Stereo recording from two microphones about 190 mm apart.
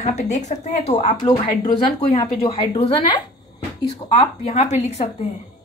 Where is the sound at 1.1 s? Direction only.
20° left (ahead or behind).